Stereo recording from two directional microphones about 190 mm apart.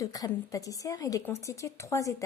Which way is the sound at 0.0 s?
20° left (ahead or behind).